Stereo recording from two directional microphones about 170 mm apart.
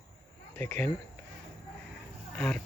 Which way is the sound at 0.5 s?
10° left (ahead or behind).